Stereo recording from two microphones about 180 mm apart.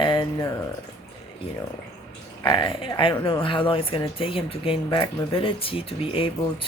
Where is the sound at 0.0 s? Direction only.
25° left (ahead or behind).